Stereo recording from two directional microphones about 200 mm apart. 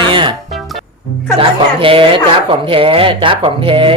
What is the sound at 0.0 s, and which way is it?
Music, 25° right (ahead or behind).